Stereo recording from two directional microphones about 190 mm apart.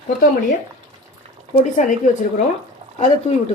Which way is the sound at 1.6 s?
40° left (ahead or behind).